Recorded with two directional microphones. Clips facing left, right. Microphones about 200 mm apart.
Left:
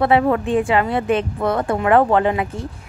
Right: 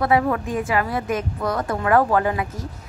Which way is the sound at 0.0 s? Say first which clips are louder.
Left 4 dB; 25° left (ahead or behind).